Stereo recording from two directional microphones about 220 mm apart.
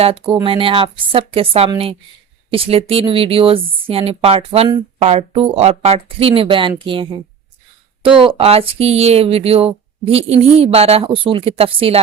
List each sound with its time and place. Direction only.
0.0 s speech: 25° right (ahead or behind)